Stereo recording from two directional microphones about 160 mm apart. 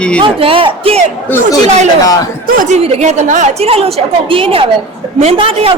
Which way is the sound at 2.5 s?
55° right (ahead or behind).